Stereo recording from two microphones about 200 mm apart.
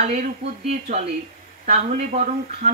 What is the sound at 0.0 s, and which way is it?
Speech, 35° right (ahead or behind).